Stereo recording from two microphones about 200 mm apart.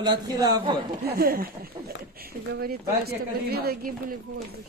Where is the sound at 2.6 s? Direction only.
50° right (ahead or behind).